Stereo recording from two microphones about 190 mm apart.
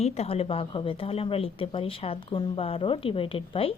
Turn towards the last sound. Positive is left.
turn(degrees=30)  # may be behind; listen again after turning